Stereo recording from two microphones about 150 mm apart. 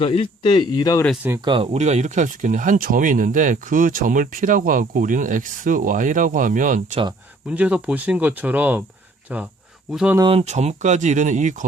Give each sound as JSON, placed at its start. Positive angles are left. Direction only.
{"t": 0.0, "sound": "a man's voice", "side_deg": 40}
{"t": 1.5, "sound": "speech", "side_deg": -35}
{"t": 7.4, "sound": "speech", "side_deg": -10}
{"t": 10.2, "sound": "speech", "side_deg": -45}